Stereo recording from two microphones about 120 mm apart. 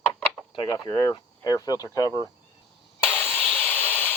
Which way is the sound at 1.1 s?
35° left (ahead or behind).